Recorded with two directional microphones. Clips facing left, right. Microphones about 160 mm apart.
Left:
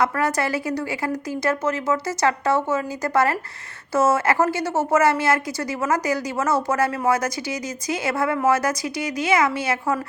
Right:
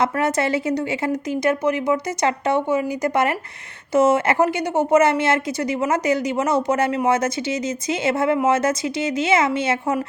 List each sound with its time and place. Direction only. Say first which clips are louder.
0.0 s a woman's voice: right 2 dB; 20° right (ahead or behind)